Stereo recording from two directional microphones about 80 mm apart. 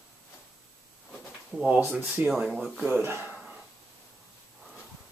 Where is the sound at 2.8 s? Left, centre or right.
Right.